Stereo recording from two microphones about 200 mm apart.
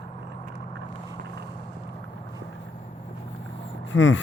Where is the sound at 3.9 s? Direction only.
70° left (ahead or behind).